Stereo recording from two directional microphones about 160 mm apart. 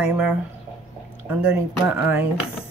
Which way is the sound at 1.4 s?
5° right (ahead or behind).